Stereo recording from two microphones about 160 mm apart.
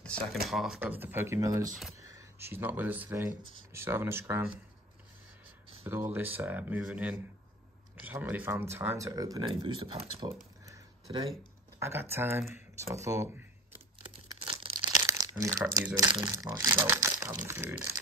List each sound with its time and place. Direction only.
0.0 s speech: 5° left (ahead or behind); by 4.5 s 15° right (ahead or behind)
5.9 s speech: 15° right (ahead or behind)
9.6 s speech: 35° right (ahead or behind)
11.1 s speech: 35° right (ahead or behind)
11.8 s speech: 15° right (ahead or behind)
14.5 s a sound: 35° right (ahead or behind)
15.0 s crumpling: 20° right (ahead or behind)
16.1 s speech: 25° right (ahead or behind)